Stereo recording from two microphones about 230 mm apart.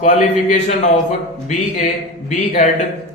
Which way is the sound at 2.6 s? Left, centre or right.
Left.